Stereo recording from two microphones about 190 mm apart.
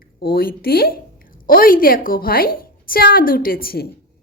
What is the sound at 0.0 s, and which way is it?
A woman's voice, 55° left (ahead or behind).